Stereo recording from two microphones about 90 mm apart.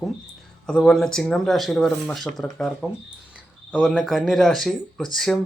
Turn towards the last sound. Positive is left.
turn(degrees=5)  # may be behind; listen again after turning